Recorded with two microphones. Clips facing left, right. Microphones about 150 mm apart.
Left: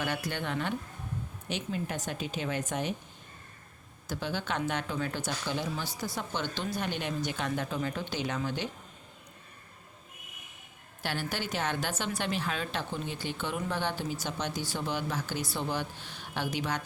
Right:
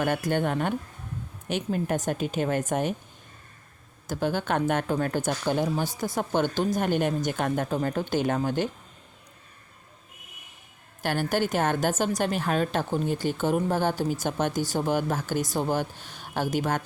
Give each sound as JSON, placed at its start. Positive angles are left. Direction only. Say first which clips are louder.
{"t": 0.0, "sound": "speech", "louder": "right 8 dB", "side_deg": -50}
{"t": 4.0, "sound": "speech", "louder": "right 7 dB", "side_deg": -45}
{"t": 11.0, "sound": "speech", "louder": "right 9 dB", "side_deg": -50}